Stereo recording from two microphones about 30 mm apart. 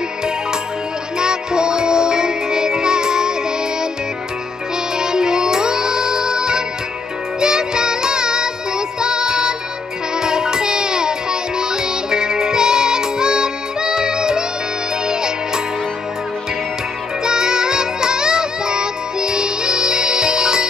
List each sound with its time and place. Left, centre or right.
1.1 s music: right
4.9 s music: right
17.2 s music: right